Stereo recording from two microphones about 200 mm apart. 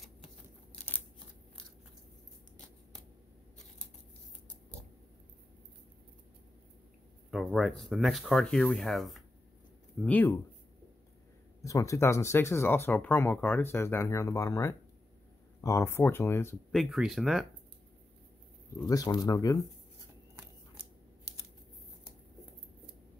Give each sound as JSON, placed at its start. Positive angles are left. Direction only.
{"t": 7.2, "sound": "speech", "side_deg": 0}
{"t": 11.6, "sound": "speech", "side_deg": 15}
{"t": 16.7, "sound": "speech", "side_deg": 0}
{"t": 18.9, "sound": "speech", "side_deg": 15}